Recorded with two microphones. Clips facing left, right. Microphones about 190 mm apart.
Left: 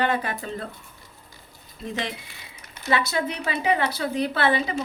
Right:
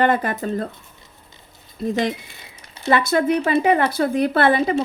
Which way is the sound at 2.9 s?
50° right (ahead or behind).